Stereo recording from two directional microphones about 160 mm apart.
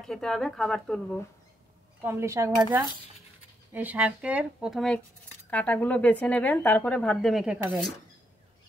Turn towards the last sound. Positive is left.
turn(degrees=-5)  # may be behind; listen again after turning